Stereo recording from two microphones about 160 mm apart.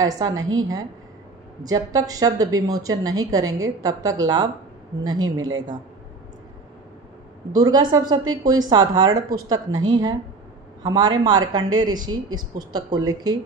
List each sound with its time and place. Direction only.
0.0 s a woman's voice: 20° right (ahead or behind)
7.5 s a woman's voice: 25° right (ahead or behind)
10.8 s a woman's voice: 25° right (ahead or behind)